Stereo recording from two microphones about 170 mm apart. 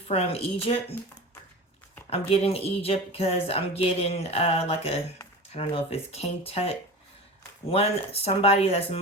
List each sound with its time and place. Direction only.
0.1 s speech: 35° left (ahead or behind)
2.0 s speech: 35° left (ahead or behind)